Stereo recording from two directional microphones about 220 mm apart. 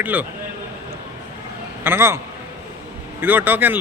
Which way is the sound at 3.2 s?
10° right (ahead or behind).